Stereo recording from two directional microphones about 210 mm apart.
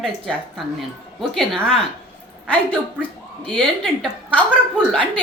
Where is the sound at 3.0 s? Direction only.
5° left (ahead or behind).